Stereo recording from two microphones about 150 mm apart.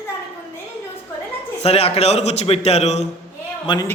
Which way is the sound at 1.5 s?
45° left (ahead or behind).